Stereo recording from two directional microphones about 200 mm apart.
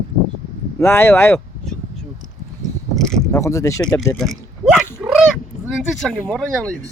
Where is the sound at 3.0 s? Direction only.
Centre (ahead or behind).